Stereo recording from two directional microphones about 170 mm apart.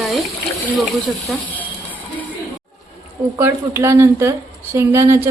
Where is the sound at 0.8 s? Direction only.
Centre (ahead or behind).